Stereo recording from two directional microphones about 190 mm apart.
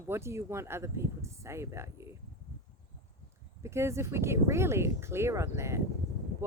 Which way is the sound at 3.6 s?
15° right (ahead or behind).